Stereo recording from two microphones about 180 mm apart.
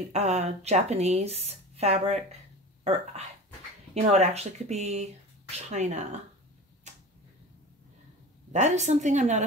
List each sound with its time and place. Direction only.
0.1 s speech: 40° right (ahead or behind)
3.9 s speech: 40° right (ahead or behind)
8.5 s speech: 40° right (ahead or behind)